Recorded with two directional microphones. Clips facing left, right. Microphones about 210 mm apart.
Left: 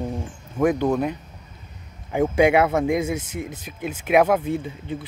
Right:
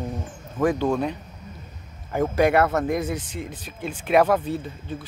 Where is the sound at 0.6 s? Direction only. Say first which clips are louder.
Left 2 dB; 10° left (ahead or behind).